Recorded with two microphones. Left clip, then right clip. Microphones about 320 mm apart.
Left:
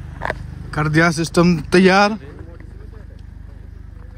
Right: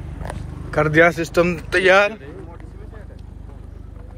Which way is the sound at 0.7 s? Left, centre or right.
Centre.